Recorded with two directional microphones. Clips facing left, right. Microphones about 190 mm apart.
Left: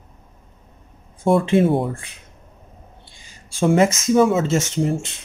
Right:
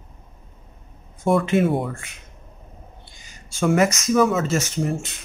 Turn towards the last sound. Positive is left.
turn(degrees=25)  # may be behind; listen again after turning